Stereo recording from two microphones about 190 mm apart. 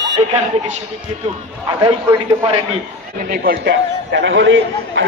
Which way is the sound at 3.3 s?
60° right (ahead or behind).